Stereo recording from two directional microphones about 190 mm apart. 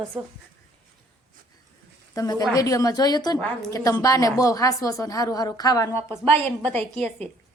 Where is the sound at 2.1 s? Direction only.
20° left (ahead or behind).